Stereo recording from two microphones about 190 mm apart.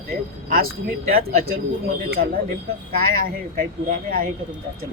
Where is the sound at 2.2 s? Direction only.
55° right (ahead or behind).